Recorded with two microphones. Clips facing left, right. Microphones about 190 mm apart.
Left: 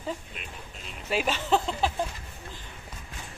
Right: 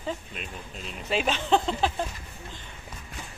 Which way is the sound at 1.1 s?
5° left (ahead or behind).